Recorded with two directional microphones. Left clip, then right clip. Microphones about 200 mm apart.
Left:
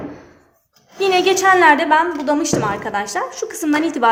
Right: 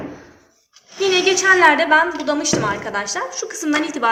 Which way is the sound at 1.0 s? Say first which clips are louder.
Left 2 dB; 55° left (ahead or behind).